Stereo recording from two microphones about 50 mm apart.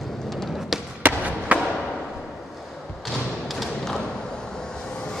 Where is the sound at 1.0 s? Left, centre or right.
Right.